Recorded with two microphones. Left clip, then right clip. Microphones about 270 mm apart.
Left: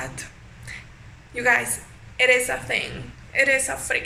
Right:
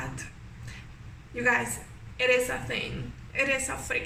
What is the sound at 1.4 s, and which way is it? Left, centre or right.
A woman's voice, centre.